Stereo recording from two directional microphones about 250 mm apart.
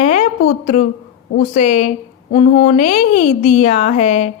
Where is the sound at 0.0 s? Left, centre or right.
Left.